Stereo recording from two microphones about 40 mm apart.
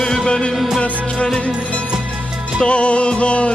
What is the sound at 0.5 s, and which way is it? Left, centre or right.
Music, centre.